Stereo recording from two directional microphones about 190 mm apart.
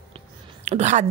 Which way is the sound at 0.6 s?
35° right (ahead or behind).